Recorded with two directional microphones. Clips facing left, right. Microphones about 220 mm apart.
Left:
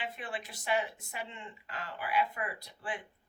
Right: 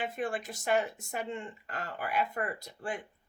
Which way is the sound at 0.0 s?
45° right (ahead or behind).